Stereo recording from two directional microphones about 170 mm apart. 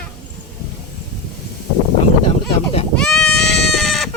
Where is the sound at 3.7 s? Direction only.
Centre (ahead or behind).